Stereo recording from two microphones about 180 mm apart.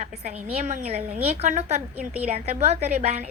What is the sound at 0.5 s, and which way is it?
A woman's voice, 40° right (ahead or behind).